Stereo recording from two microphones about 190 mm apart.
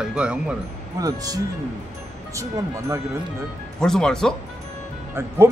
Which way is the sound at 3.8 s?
5° left (ahead or behind).